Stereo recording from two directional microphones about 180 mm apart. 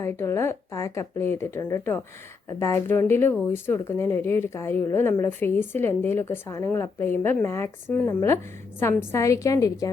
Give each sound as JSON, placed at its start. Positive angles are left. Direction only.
{"t": 0.0, "sound": "speech", "side_deg": 15}